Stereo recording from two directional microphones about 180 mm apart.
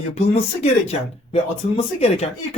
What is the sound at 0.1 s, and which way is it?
Speech, 35° left (ahead or behind).